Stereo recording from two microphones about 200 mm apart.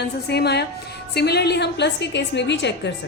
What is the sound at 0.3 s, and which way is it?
A woman's voice, 55° left (ahead or behind).